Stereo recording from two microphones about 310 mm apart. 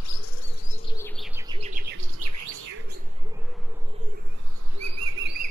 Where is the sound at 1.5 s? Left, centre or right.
Right.